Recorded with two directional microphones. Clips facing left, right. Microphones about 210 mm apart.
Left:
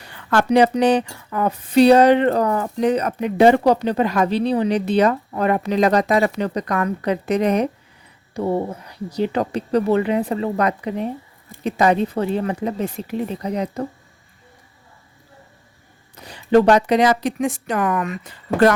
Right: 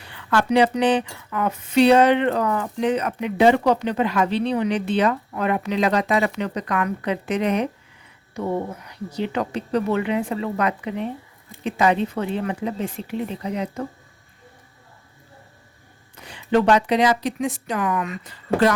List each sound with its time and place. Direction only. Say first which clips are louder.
0.1 s speech: left 3 dB; 45° left (ahead or behind)
16.1 s speech: left 5 dB; 40° left (ahead or behind)